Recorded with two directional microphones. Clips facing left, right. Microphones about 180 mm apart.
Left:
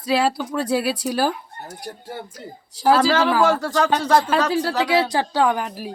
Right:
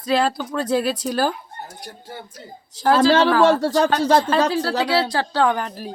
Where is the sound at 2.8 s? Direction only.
10° left (ahead or behind).